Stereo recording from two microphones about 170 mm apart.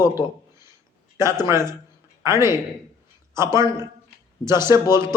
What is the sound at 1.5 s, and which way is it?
A man's voice, 15° right (ahead or behind).